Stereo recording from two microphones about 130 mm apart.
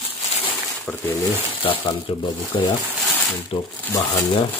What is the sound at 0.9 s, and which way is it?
Speech, 10° left (ahead or behind).